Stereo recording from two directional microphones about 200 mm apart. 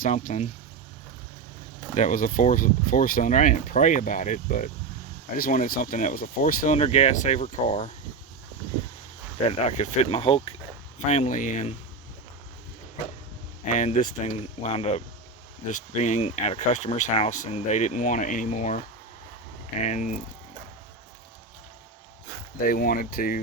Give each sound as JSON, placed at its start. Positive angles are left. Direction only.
{"t": 0.0, "sound": "speech", "side_deg": 40}
{"t": 2.0, "sound": "speech", "side_deg": 40}
{"t": 9.5, "sound": "speech", "side_deg": 35}
{"t": 13.7, "sound": "speech", "side_deg": 40}
{"t": 19.8, "sound": "speech", "side_deg": 35}
{"t": 22.6, "sound": "speech", "side_deg": 45}